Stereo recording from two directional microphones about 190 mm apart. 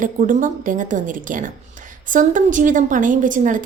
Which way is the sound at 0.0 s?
45° right (ahead or behind).